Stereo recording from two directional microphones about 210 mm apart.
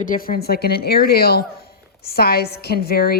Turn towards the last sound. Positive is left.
turn(degrees=45)  # may be behind; listen again after turning